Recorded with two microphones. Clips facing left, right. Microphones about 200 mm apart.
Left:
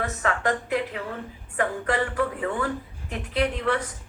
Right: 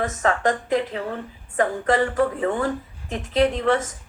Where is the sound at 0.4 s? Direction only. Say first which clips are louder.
Right 4 dB; 35° right (ahead or behind).